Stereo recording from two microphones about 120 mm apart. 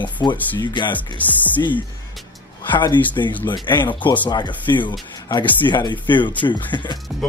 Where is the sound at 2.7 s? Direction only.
40° left (ahead or behind).